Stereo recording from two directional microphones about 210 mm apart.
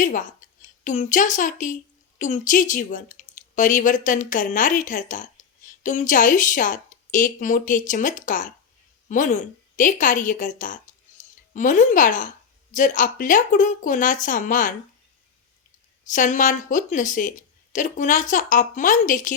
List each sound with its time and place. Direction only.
0.0 s a woman's voice: 40° left (ahead or behind)
11.2 s music: 35° left (ahead or behind)
11.5 s a woman's voice: 35° left (ahead or behind)
16.0 s a woman's voice: 35° left (ahead or behind)